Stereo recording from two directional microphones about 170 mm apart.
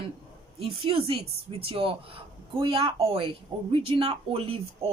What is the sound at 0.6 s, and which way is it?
Speech, 35° right (ahead or behind).